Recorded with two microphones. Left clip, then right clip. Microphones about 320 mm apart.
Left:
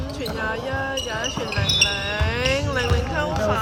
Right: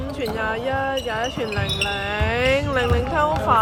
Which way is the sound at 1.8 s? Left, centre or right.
Right.